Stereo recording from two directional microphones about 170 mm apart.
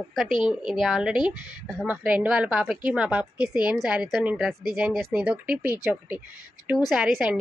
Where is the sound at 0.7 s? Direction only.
Centre (ahead or behind).